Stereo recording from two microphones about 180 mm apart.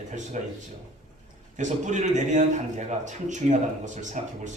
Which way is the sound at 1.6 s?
40° right (ahead or behind).